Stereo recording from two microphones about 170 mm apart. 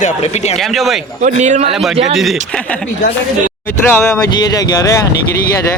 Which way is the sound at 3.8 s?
15° left (ahead or behind).